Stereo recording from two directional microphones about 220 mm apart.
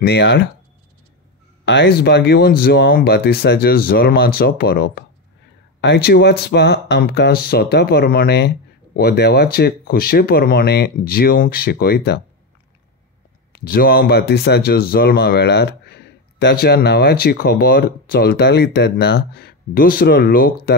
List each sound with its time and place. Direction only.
0.0 s speech: 50° left (ahead or behind)
1.7 s speech: 50° left (ahead or behind)
13.5 s speech: 40° left (ahead or behind)